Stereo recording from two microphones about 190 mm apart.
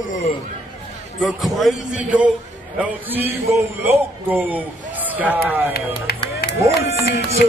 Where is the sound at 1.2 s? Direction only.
Centre (ahead or behind).